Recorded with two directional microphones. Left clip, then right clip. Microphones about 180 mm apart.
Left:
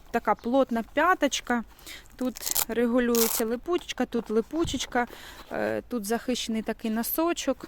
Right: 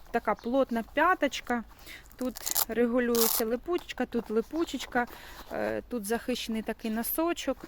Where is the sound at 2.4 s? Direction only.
20° left (ahead or behind).